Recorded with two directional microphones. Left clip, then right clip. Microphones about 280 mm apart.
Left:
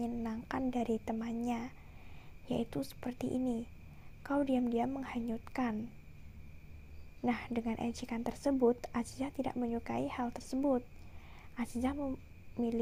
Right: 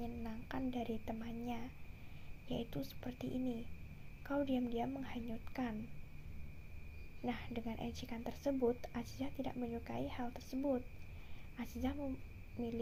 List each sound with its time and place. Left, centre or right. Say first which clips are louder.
0.0 s a woman's voice: left 8 dB; left
7.2 s a woman's voice: left 8 dB; left